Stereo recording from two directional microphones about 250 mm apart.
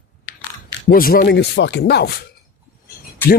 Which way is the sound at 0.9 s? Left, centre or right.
Left.